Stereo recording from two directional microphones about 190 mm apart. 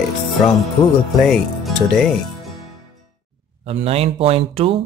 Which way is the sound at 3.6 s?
30° right (ahead or behind).